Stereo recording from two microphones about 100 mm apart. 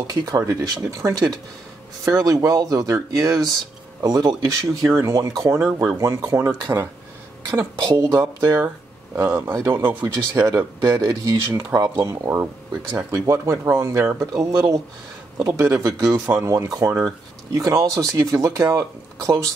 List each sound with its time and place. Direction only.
0.0 s speech: 40° right (ahead or behind)
7.5 s speech: 45° right (ahead or behind)
9.1 s speech: 20° right (ahead or behind)
9.8 s speech: 40° right (ahead or behind)